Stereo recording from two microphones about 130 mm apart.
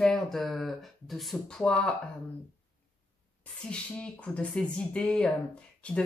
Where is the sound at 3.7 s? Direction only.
10° left (ahead or behind).